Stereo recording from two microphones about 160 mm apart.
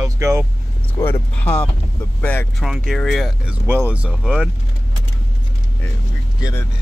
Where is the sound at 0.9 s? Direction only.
15° left (ahead or behind).